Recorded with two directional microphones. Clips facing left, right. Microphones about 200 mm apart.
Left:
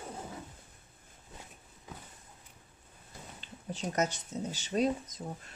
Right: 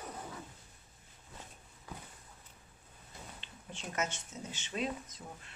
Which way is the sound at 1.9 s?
20° left (ahead or behind).